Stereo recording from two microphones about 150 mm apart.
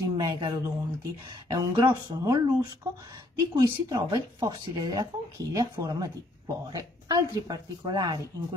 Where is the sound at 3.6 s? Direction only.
25° right (ahead or behind).